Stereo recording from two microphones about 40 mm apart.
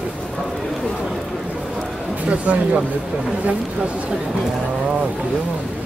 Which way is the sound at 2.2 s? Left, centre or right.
Right.